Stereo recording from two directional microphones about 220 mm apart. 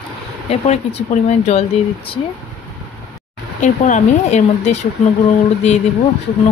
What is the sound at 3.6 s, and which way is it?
Speech, 35° left (ahead or behind).